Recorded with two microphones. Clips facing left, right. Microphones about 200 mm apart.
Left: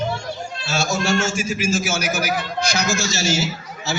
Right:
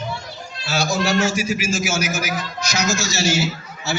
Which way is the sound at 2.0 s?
60° left (ahead or behind).